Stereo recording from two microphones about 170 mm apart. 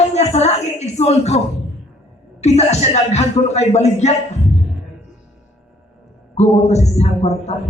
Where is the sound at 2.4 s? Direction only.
40° left (ahead or behind).